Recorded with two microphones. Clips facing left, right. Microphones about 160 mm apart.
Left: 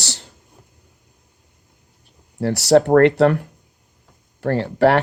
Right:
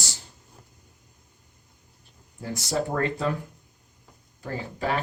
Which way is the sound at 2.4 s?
75° left (ahead or behind).